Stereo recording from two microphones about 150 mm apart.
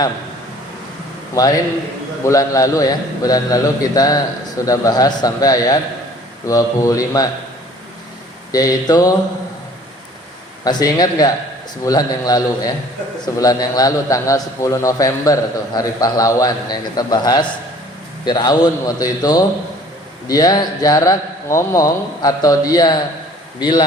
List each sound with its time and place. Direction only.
1.4 s a man's voice: 25° left (ahead or behind)
8.5 s a man's voice: 25° left (ahead or behind)
10.6 s a man's voice: 25° left (ahead or behind)